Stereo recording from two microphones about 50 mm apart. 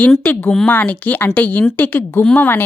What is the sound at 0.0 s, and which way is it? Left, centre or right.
Speech, left.